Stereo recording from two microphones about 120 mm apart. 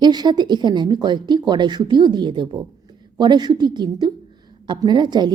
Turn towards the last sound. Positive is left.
turn(degrees=-40)  # may be behind; listen again after turning